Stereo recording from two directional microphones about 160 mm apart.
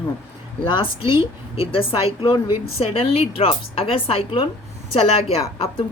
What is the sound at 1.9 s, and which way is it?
A woman's voice, 30° left (ahead or behind).